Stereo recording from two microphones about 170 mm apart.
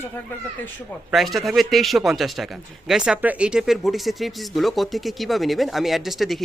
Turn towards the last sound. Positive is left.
turn(degrees=0)  # may be behind; listen again after turning